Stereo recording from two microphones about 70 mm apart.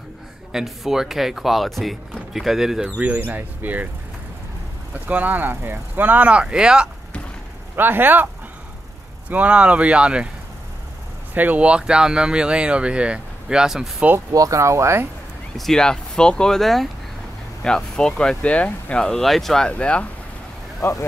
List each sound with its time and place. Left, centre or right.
0.5 s speech: centre
3.0 s speech: centre
5.0 s speech: right
7.7 s speech: right
9.3 s speech: centre
11.3 s speech: right
14.3 s speech: right
15.5 s speech: centre
19.0 s speech: centre
19.7 s speech: centre
20.8 s speech: left